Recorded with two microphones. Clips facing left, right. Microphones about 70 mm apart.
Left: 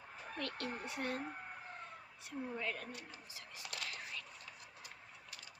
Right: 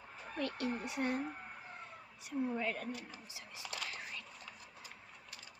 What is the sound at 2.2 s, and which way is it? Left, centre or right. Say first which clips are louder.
Speech: right 5 dB; centre.